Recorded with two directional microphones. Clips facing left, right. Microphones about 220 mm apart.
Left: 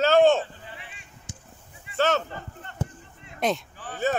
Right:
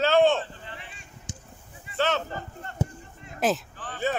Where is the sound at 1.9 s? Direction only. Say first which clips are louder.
Left 3 dB; 45° left (ahead or behind).